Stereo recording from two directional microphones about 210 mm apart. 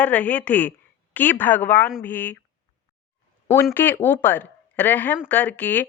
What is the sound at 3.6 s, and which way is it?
A woman's voice, 10° left (ahead or behind).